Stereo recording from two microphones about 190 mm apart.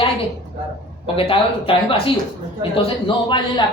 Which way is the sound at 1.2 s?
30° left (ahead or behind).